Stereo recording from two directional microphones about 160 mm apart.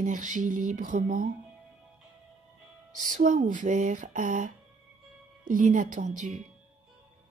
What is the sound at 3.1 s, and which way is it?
Speech, 50° right (ahead or behind).